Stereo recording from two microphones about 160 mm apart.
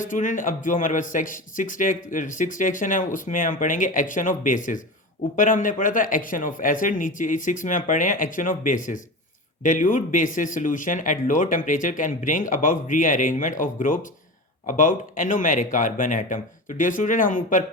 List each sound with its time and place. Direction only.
0.0 s speech: 55° left (ahead or behind)